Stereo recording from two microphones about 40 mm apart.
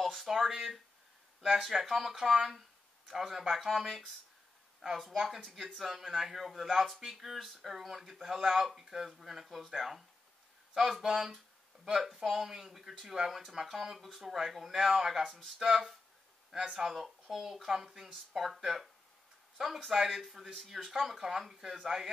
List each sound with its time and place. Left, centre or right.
0.0 s speech: centre
5.1 s speech: centre
14.3 s speech: centre
16.5 s speech: centre
16.8 s speech: centre